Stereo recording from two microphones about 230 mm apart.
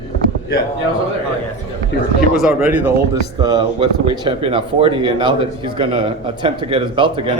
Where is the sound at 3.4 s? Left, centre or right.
Centre.